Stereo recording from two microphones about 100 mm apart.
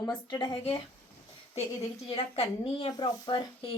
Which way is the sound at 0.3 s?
40° left (ahead or behind).